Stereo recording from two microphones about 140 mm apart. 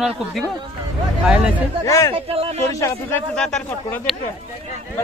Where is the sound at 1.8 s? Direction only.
20° left (ahead or behind).